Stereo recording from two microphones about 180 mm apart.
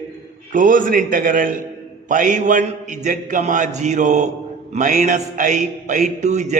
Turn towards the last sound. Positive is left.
turn(degrees=-40)  # may be behind; listen again after turning